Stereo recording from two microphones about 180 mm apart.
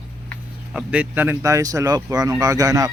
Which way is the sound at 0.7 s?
5° right (ahead or behind).